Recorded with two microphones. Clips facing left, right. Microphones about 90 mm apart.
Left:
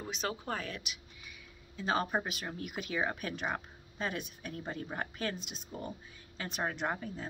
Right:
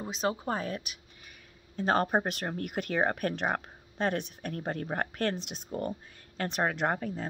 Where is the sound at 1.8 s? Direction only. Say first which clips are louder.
Right 6 dB; 50° right (ahead or behind).